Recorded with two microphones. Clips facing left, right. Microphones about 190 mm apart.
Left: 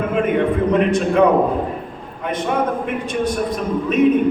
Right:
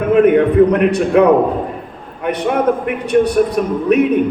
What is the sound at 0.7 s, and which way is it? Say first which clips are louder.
Speech: right 3 dB; 65° right (ahead or behind).